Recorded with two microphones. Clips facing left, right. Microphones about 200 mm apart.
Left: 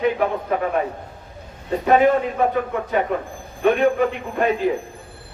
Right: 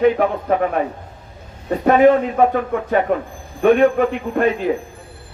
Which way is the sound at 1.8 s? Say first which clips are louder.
Right 4 dB; 50° right (ahead or behind).